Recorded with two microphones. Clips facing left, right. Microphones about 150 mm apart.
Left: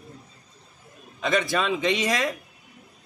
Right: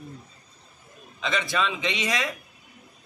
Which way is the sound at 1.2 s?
45° left (ahead or behind).